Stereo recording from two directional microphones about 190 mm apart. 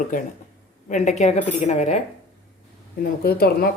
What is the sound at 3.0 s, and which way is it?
Speech, 50° left (ahead or behind).